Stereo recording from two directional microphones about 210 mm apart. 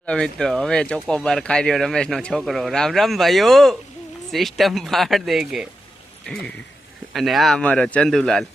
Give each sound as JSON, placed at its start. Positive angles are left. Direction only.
{"t": 0.0, "sound": "speech", "side_deg": 5}